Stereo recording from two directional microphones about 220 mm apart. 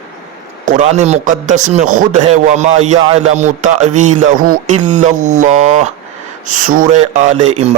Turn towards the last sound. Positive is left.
turn(degrees=-30)  # may be behind; listen again after turning